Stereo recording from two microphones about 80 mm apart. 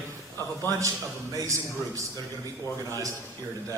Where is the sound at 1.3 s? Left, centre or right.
Right.